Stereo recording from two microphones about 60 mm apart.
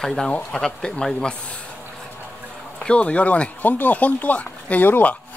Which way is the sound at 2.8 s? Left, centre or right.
Centre.